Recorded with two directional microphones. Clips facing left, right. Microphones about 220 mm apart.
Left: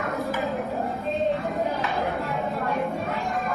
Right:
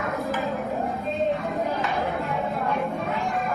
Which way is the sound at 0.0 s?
Centre (ahead or behind).